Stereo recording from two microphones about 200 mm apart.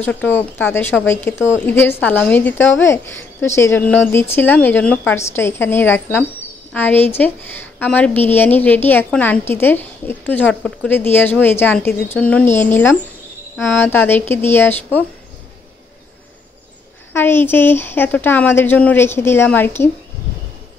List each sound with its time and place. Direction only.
0.0 s a woman's voice: 10° left (ahead or behind)
17.1 s a woman's voice: 10° left (ahead or behind)